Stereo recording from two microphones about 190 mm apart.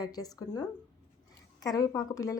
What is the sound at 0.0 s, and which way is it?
Speech, 20° left (ahead or behind).